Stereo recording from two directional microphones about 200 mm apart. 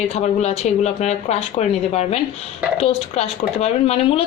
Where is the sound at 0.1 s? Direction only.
35° left (ahead or behind).